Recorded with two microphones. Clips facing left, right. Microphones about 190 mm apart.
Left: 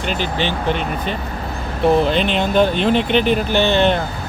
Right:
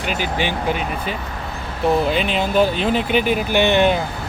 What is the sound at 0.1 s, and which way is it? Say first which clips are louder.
Speech: left 1 dB; 10° right (ahead or behind).